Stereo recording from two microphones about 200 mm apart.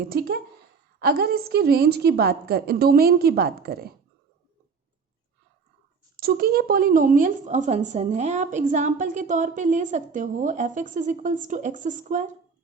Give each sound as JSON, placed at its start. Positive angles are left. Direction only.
{"t": 0.1, "sound": "a woman's voice", "side_deg": -50}
{"t": 6.1, "sound": "a woman's voice", "side_deg": -50}